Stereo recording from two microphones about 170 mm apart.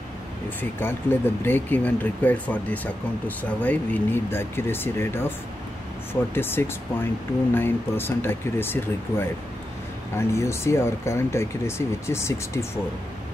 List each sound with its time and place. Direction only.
0.6 s speech: 10° left (ahead or behind)
6.3 s speech: 15° left (ahead or behind)